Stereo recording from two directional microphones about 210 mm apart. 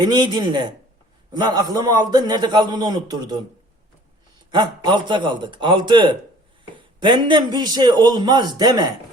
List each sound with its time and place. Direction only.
0.0 s a man's voice: 20° right (ahead or behind)
4.5 s a man's voice: 20° right (ahead or behind)